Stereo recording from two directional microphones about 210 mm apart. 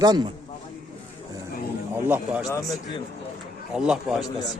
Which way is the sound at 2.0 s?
10° right (ahead or behind).